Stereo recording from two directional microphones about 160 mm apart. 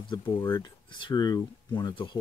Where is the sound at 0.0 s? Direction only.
30° left (ahead or behind).